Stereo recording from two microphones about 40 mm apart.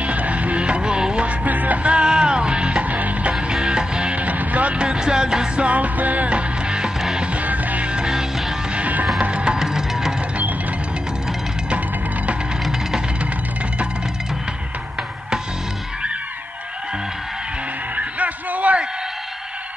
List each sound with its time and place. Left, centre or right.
0.0 s music: right
1.2 s music: right
1.9 s music: right
2.8 s music: right
3.3 s music: centre
4.2 s music: right
4.7 s music: right
5.7 s music: right
7.9 s music: centre
8.7 s music: right
9.2 s music: right
9.6 s music: centre
17.9 s a sound: right